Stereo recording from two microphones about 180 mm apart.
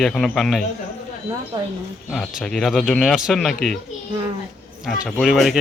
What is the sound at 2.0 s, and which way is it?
Speech, centre (ahead or behind).